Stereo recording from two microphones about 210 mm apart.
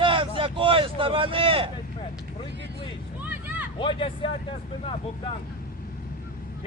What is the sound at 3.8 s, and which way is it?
Speech, 25° left (ahead or behind).